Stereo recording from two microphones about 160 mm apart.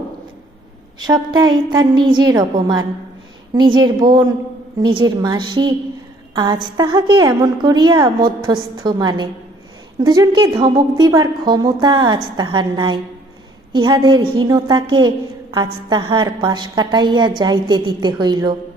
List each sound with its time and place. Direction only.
0.9 s a woman's voice: 25° right (ahead or behind)